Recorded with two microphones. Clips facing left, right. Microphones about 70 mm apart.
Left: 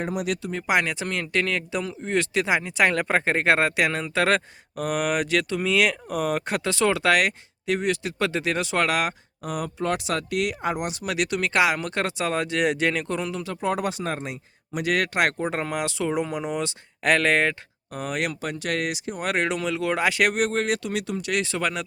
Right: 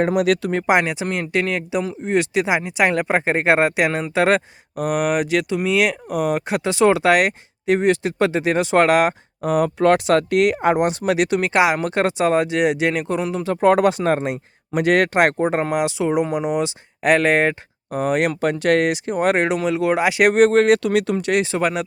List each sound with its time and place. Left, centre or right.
0.0 s speech: right
0.7 s speech: right
9.6 s speech: right
10.8 s speech: right
11.1 s speech: right
13.6 s speech: right
18.3 s speech: right; by 20.3 s centre
20.3 s speech: right
21.3 s speech: right